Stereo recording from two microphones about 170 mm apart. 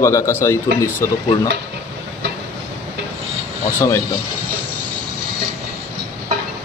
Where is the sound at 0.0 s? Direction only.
15° left (ahead or behind).